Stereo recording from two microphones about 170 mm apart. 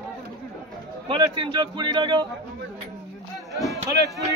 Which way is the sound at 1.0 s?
30° right (ahead or behind).